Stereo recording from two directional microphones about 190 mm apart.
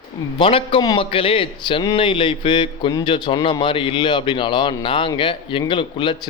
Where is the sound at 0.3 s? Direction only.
25° left (ahead or behind).